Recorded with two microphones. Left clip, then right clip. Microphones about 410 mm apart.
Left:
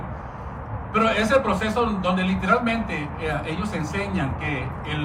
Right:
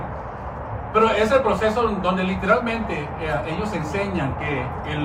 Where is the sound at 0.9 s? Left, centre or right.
Centre.